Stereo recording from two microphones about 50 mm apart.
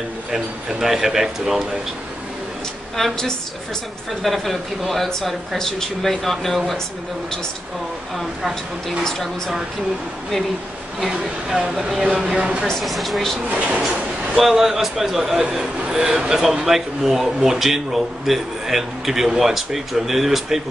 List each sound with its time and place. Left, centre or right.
0.3 s speech: centre
3.0 s a woman's voice: centre
4.2 s speech: centre
11.1 s speech: centre
12.6 s speech: centre
13.5 s speech: right
14.3 s speech: centre